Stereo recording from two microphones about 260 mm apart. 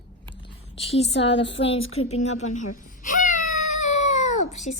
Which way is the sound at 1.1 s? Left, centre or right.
Left.